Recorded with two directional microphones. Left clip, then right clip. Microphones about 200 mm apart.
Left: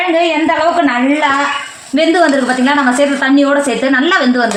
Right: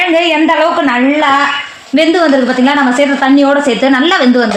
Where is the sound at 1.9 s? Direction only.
45° right (ahead or behind).